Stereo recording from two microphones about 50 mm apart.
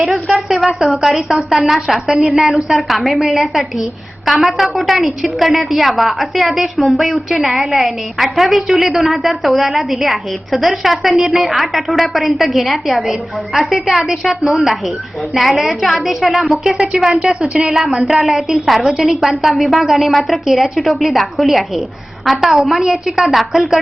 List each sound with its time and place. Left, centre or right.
0.3 s a woman's voice: centre
17.7 s a woman's voice: centre